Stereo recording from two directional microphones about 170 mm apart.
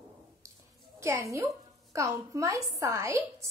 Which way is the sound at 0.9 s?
15° right (ahead or behind).